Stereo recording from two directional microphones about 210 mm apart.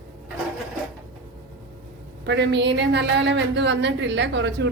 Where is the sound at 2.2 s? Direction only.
55° right (ahead or behind).